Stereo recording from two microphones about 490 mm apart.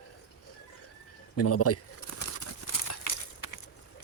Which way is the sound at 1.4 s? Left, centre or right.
Left.